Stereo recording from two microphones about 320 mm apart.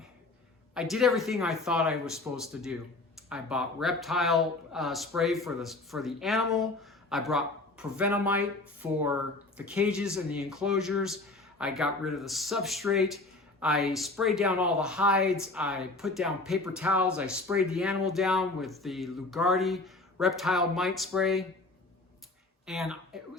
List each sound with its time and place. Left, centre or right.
0.7 s speech: centre
22.6 s speech: centre